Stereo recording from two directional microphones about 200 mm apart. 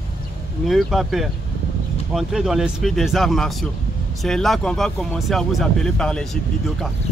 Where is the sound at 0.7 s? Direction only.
Centre (ahead or behind).